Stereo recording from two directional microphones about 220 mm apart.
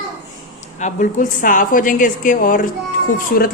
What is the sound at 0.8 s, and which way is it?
A woman's voice, 35° left (ahead or behind).